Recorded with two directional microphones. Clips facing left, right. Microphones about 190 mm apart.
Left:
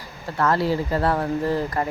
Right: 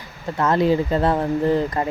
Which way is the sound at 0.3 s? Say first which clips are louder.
Right 3 dB; 20° right (ahead or behind).